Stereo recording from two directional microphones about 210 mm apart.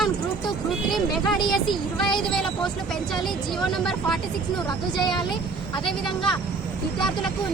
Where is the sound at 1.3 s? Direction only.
20° left (ahead or behind).